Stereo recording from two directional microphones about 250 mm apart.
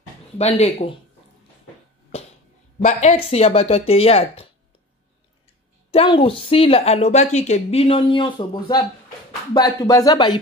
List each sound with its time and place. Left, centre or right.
0.4 s a woman's voice: left
2.8 s a woman's voice: left
5.9 s a woman's voice: left